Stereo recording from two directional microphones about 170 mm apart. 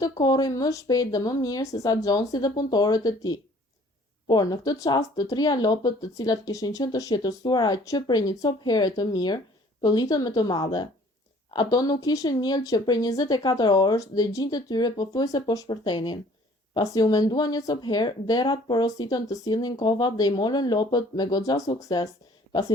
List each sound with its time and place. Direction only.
0.0 s speech: 25° left (ahead or behind)